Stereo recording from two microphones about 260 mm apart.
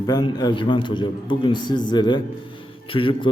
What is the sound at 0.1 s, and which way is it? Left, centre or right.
A man's voice, centre.